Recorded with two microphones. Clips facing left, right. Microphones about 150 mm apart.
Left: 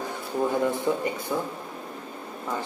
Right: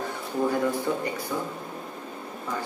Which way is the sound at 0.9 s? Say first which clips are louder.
Left 2 dB; 25° left (ahead or behind).